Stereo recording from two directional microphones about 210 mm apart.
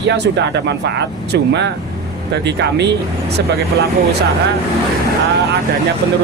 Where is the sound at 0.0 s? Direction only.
55° right (ahead or behind).